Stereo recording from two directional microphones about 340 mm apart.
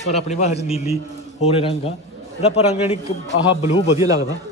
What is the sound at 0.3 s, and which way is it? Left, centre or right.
A man's voice, centre.